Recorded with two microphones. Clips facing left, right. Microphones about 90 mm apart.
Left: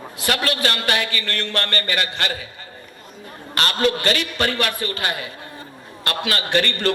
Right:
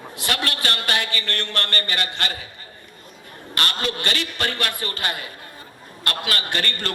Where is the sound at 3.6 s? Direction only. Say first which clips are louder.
Left 6 dB; 30° left (ahead or behind).